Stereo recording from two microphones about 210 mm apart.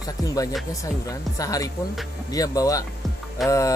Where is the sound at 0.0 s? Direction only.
15° left (ahead or behind).